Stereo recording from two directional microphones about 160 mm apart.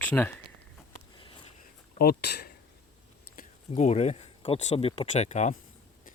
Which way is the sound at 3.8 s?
45° left (ahead or behind).